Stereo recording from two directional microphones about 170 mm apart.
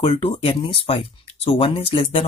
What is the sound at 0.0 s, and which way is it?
Speech, 35° left (ahead or behind).